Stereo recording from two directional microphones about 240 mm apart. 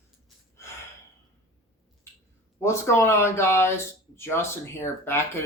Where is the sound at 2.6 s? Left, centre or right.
Centre.